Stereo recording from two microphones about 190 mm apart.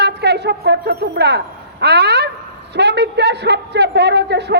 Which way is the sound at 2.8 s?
60° right (ahead or behind).